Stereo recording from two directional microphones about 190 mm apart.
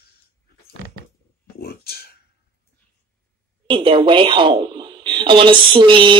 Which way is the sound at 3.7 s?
25° right (ahead or behind).